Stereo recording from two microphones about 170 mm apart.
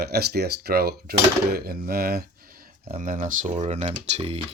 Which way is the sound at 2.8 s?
45° right (ahead or behind).